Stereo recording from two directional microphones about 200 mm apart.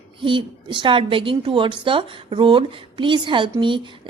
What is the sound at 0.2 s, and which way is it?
Speech, 25° right (ahead or behind).